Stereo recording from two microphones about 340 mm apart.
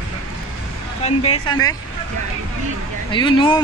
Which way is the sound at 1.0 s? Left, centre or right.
Centre.